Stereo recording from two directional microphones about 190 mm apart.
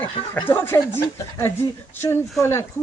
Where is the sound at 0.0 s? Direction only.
10° left (ahead or behind).